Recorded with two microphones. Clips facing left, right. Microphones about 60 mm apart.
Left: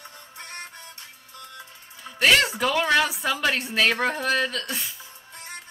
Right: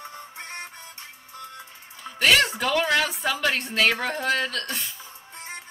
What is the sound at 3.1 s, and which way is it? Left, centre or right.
Speech, centre.